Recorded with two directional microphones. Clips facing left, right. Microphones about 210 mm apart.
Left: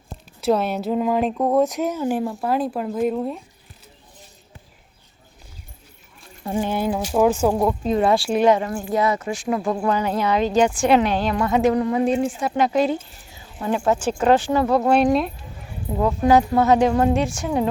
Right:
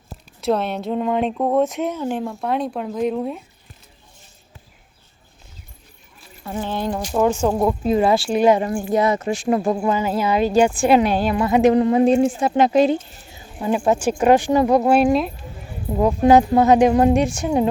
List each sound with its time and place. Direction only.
0.4 s speech: 5° left (ahead or behind)
6.6 s speech: 10° left (ahead or behind)
8.5 s a woman's voice: 20° right (ahead or behind)
9.7 s a woman's voice: 5° right (ahead or behind)
11.6 s a woman's voice: 25° right (ahead or behind)
14.8 s speech: 5° right (ahead or behind)
15.9 s a woman's voice: 15° right (ahead or behind)